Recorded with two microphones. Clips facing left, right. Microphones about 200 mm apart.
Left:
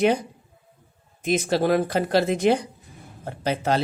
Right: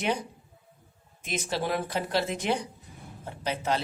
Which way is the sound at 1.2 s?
40° left (ahead or behind).